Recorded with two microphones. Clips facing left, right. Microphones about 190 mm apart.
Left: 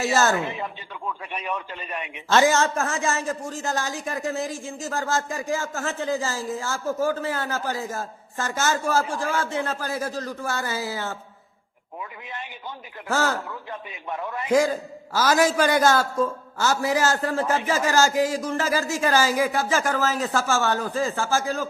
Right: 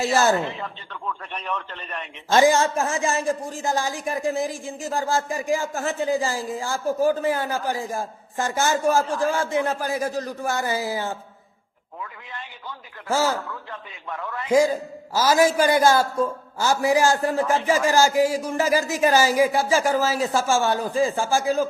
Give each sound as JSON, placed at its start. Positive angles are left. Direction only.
{"t": 0.0, "sound": "speech", "side_deg": -10}
{"t": 0.3, "sound": "speech", "side_deg": 15}
{"t": 2.3, "sound": "speech", "side_deg": -15}
{"t": 12.3, "sound": "a man's voice", "side_deg": 20}
{"t": 13.1, "sound": "speech", "side_deg": -10}
{"t": 13.5, "sound": "a man's voice", "side_deg": 20}
{"t": 14.5, "sound": "speech", "side_deg": -10}